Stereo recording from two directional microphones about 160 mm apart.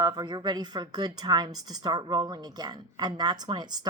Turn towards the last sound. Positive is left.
turn(degrees=-25)  # may be behind; listen again after turning